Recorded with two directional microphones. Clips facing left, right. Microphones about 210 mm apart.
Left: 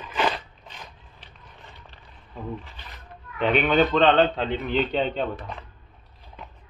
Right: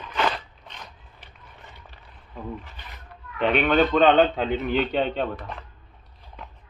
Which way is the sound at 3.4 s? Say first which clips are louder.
Even; centre (ahead or behind).